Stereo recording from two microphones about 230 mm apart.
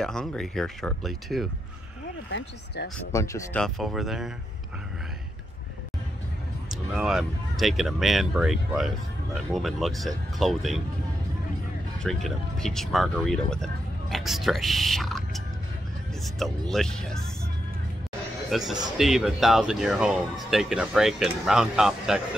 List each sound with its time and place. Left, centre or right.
0.0 s speech: centre
2.3 s speech: left
3.1 s speech: centre
3.6 s speech: centre
6.7 s speech: centre
12.0 s speech: centre
18.5 s speech: centre